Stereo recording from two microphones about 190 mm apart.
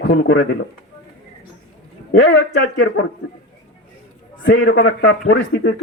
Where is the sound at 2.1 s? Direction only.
65° left (ahead or behind).